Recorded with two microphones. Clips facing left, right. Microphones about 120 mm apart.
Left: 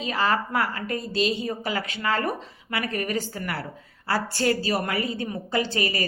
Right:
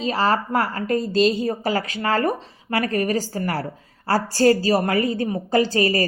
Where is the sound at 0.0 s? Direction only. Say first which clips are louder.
Right 4 dB; 30° right (ahead or behind).